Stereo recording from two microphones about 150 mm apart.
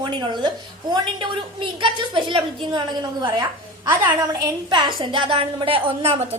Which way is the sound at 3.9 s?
20° right (ahead or behind).